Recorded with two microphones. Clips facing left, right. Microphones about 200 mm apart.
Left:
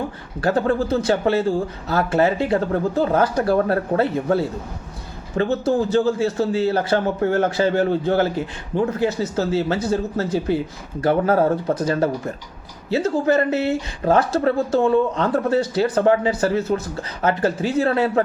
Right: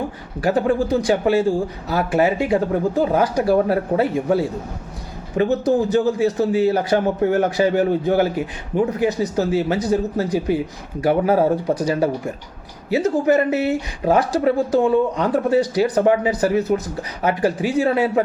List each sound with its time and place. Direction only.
0.4 s speech: 15° right (ahead or behind)